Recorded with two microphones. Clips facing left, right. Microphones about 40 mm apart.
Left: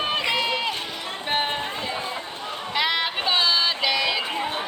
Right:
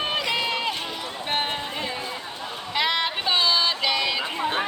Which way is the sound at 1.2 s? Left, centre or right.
Centre.